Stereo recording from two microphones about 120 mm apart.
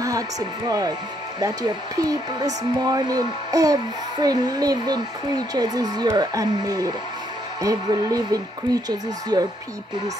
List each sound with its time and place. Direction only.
0.7 s speech: 30° right (ahead or behind)